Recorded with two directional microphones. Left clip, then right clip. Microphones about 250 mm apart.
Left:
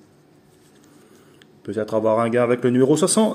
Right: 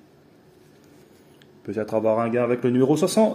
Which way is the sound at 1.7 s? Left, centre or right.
Centre.